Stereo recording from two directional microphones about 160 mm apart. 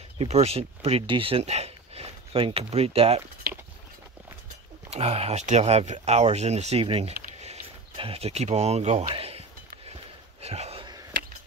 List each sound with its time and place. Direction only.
0.2 s speech: 40° right (ahead or behind)
4.8 s speech: 40° right (ahead or behind)
10.4 s a sound: 40° right (ahead or behind)